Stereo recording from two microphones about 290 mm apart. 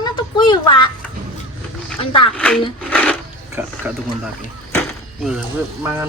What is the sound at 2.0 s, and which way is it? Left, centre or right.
Speech, centre.